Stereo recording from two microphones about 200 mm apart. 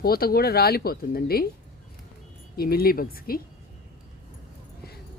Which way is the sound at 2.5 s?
50° left (ahead or behind).